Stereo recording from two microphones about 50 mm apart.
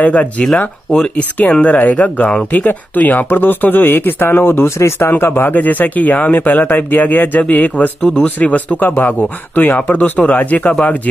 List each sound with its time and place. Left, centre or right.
0.0 s speech: left
1.5 s speech: left
4.7 s speech: left
5.2 s speech: left
8.0 s speech: centre
8.4 s speech: left